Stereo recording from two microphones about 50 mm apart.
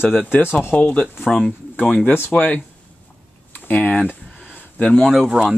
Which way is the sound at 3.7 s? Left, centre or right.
Left.